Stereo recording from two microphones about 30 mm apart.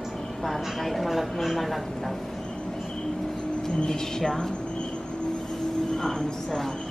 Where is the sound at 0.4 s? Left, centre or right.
Centre.